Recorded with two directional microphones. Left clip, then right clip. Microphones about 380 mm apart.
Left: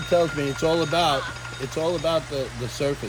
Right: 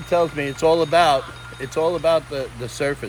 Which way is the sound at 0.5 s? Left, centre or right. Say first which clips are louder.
Right 7 dB; centre.